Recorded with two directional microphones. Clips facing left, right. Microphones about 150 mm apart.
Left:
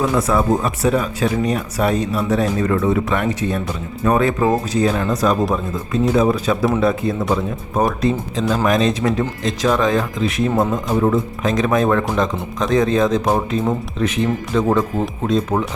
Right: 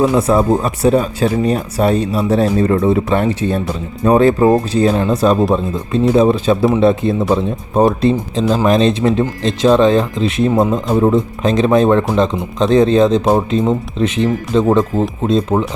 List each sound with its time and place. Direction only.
0.2 s speech: 30° right (ahead or behind)